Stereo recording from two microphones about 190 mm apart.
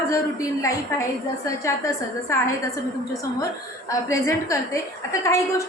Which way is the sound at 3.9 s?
15° left (ahead or behind).